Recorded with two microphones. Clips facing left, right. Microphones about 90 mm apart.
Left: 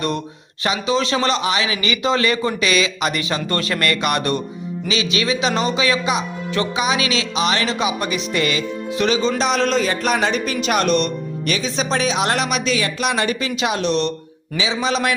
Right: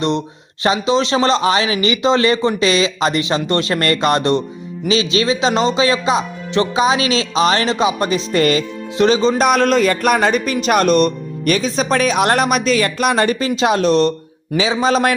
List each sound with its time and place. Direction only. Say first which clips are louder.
0.6 s speech: right 4 dB; 30° right (ahead or behind)
9.4 s a man's voice: right 5 dB; 50° right (ahead or behind)